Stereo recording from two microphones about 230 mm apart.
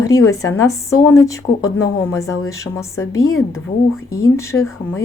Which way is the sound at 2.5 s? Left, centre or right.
Centre.